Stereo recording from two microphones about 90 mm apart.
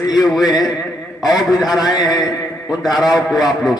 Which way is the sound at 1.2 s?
50° left (ahead or behind).